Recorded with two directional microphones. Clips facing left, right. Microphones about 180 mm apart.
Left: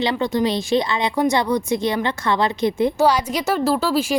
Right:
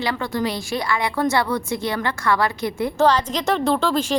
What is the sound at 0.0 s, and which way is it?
A woman's voice, 20° left (ahead or behind).